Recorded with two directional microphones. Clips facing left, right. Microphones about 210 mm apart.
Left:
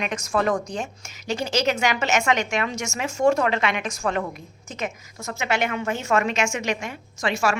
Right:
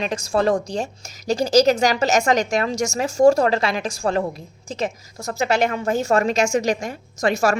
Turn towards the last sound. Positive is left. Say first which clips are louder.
# right 5 dB
turn(degrees=-40)  # may be behind; listen again after turning